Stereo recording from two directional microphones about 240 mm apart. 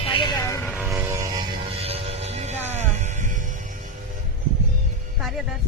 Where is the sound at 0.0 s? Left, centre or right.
Left.